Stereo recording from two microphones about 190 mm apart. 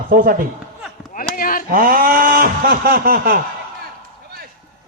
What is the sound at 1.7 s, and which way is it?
A man's voice, 50° right (ahead or behind).